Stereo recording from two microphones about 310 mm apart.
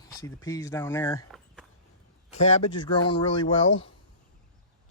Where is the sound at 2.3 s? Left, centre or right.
Left.